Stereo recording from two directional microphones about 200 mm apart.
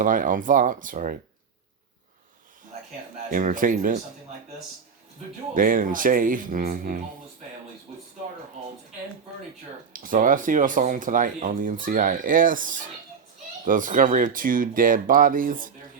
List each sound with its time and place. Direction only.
0.0 s speech: 40° right (ahead or behind)
3.2 s speech: 40° right (ahead or behind)
5.5 s speech: 45° right (ahead or behind)
9.9 s speech: 45° right (ahead or behind)